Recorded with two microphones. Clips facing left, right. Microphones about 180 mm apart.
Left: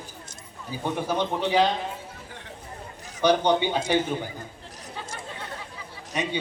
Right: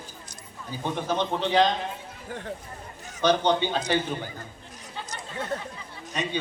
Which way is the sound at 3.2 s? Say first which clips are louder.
Left 1 dB; 10° left (ahead or behind).